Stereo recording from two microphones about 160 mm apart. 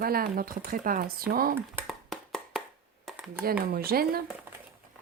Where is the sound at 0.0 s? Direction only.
65° right (ahead or behind).